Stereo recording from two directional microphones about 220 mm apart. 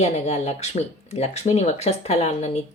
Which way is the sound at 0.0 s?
30° left (ahead or behind).